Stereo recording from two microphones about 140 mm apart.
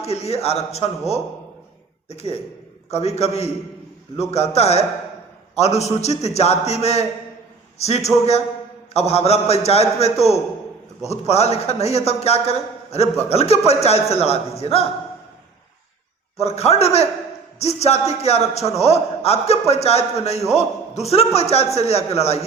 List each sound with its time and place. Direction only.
0.0 s a man's voice: 50° left (ahead or behind)
16.4 s a man's voice: 50° left (ahead or behind)